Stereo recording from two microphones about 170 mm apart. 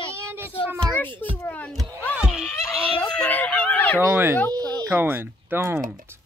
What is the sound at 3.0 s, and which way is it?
Speech, 10° left (ahead or behind).